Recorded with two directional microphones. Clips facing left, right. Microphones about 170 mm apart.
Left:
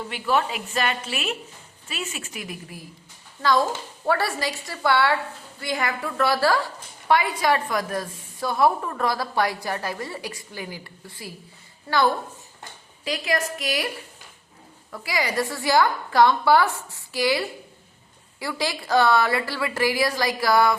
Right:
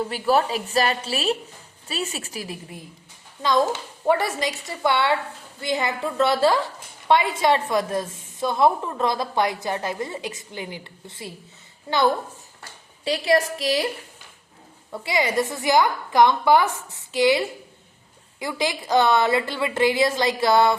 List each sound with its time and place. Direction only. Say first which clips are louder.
0.1 s a woman's voice: right 1 dB; 35° right (ahead or behind)
4.0 s a woman's voice: right 3 dB; 20° right (ahead or behind)
13.1 s a woman's voice: right 5 dB; 30° right (ahead or behind)
14.9 s a woman's voice: right 3 dB; 25° right (ahead or behind)